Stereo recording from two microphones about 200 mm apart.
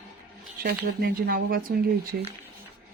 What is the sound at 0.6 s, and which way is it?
Speech, 50° right (ahead or behind).